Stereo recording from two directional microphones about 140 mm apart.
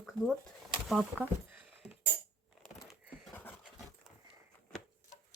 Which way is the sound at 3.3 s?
15° left (ahead or behind).